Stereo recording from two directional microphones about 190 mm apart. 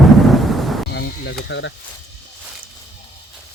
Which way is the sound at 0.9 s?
60° left (ahead or behind).